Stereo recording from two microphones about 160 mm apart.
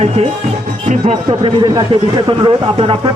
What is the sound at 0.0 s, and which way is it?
Speech, 40° right (ahead or behind).